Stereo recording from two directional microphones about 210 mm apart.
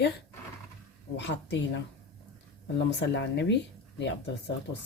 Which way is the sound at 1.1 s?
55° left (ahead or behind).